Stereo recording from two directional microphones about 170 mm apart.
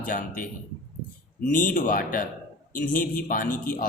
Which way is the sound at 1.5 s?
50° left (ahead or behind).